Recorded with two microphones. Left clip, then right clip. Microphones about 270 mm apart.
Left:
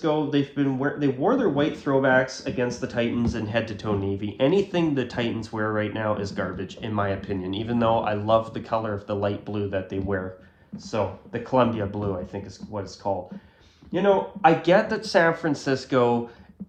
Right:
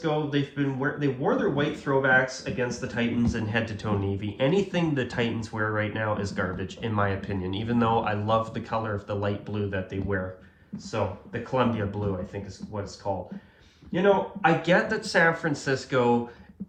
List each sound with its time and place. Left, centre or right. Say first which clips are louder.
0.0 s speech: left 3 dB; centre